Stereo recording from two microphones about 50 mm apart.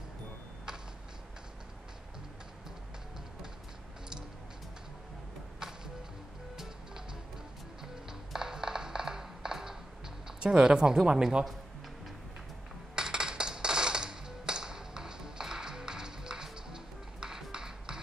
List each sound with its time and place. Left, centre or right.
7.8 s music: centre
12.9 s music: centre